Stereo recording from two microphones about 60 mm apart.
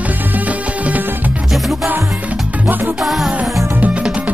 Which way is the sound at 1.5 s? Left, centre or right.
Centre.